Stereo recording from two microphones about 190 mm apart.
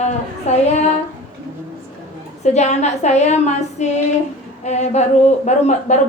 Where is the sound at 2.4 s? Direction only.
35° left (ahead or behind).